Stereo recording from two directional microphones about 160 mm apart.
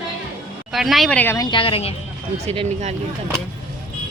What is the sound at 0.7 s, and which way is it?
Speech, centre (ahead or behind).